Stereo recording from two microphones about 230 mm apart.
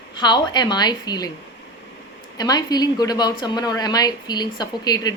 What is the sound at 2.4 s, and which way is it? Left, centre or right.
Speech, centre.